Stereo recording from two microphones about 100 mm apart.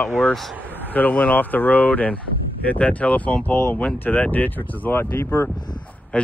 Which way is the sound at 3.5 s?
25° left (ahead or behind).